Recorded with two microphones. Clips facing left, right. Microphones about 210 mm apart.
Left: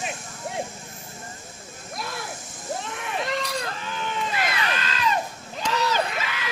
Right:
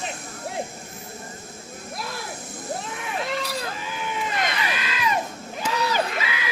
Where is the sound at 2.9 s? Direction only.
Centre (ahead or behind).